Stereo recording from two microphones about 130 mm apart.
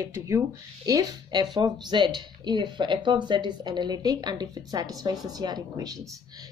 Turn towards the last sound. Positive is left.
turn(degrees=-30)  # may be behind; listen again after turning